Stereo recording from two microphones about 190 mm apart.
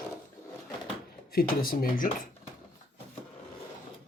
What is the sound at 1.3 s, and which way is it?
Speech, 50° left (ahead or behind).